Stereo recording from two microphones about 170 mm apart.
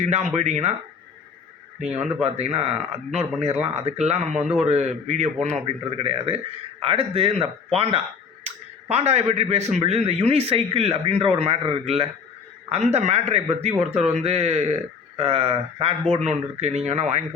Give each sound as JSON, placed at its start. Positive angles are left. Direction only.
{"t": 0.0, "sound": "speech", "side_deg": -45}
{"t": 1.8, "sound": "speech", "side_deg": -40}
{"t": 6.0, "sound": "speech", "side_deg": -35}